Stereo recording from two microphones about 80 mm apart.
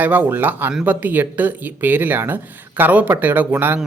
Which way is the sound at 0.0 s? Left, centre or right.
Right.